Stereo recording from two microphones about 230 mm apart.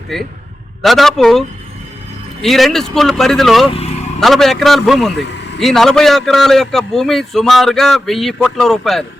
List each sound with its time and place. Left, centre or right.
0.1 s a man's voice: centre
3.8 s vehicle: left
4.2 s a man's voice: centre
5.1 s a sound: left
5.5 s a man's voice: centre